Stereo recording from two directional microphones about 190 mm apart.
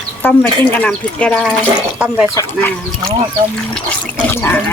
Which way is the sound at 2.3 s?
15° left (ahead or behind).